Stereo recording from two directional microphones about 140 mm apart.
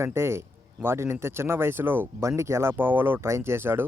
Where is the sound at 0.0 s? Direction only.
20° right (ahead or behind).